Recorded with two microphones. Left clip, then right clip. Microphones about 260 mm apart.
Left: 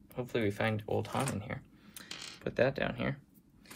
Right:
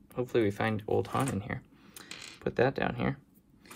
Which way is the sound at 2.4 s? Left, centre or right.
Right.